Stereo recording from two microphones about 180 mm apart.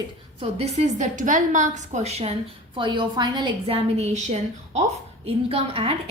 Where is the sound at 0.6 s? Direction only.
40° right (ahead or behind).